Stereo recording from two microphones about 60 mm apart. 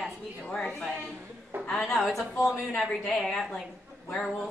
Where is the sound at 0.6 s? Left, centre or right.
Centre.